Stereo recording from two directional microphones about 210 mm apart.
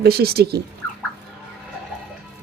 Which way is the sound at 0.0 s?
50° right (ahead or behind).